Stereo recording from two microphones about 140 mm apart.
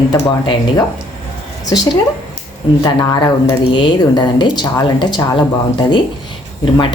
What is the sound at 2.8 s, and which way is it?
Speech, 25° left (ahead or behind).